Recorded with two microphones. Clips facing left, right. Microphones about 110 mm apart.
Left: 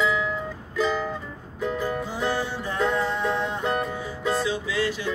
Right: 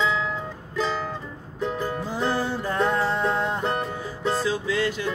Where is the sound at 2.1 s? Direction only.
45° right (ahead or behind).